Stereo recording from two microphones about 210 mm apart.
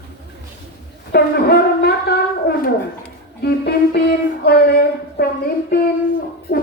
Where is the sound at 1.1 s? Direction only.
50° left (ahead or behind).